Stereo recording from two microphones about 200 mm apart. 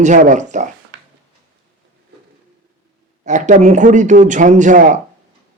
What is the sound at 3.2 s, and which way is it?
A man's voice, 40° right (ahead or behind).